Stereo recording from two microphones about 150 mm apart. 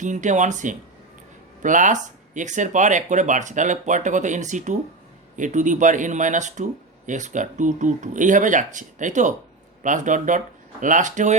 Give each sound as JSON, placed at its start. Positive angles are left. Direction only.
{"t": 0.0, "sound": "speech", "side_deg": -55}